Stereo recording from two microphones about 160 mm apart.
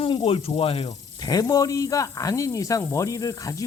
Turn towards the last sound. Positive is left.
turn(degrees=20)  # may be behind; listen again after turning